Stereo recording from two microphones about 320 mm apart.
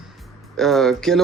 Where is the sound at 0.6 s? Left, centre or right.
Centre.